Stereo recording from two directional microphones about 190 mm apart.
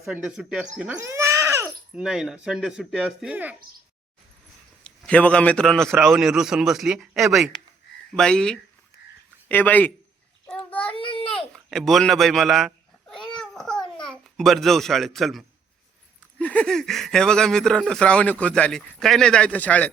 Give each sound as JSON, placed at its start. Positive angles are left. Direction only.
{"t": 0.0, "sound": "speech", "side_deg": -5}
{"t": 4.8, "sound": "a man's voice", "side_deg": 5}
{"t": 10.5, "sound": "child singing", "side_deg": 5}
{"t": 10.9, "sound": "a sound", "side_deg": 30}
{"t": 11.5, "sound": "cat", "side_deg": 0}
{"t": 14.1, "sound": "a child's voice", "side_deg": 0}